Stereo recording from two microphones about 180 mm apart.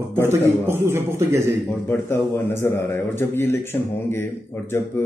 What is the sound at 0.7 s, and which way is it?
Speech, 15° right (ahead or behind).